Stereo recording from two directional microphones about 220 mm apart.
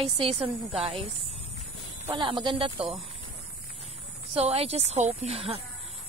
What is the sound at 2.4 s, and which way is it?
Speech, 25° right (ahead or behind).